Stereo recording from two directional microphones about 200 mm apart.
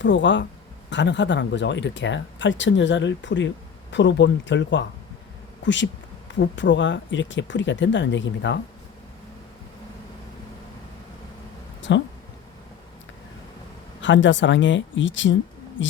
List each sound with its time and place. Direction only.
0.0 s speech: 65° left (ahead or behind)
11.8 s speech: 65° left (ahead or behind)
14.0 s speech: 65° left (ahead or behind)